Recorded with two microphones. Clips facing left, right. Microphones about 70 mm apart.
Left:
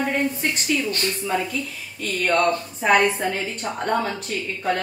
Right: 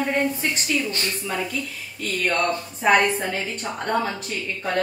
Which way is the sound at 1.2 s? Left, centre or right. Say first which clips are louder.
Left 3 dB; centre.